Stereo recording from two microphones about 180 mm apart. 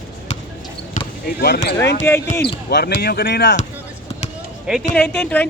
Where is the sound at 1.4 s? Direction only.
65° left (ahead or behind).